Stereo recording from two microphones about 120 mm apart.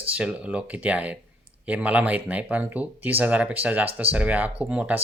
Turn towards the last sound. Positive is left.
turn(degrees=-10)  # may be behind; listen again after turning